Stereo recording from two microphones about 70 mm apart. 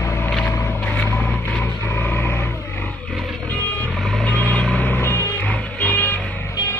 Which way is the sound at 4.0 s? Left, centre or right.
Centre.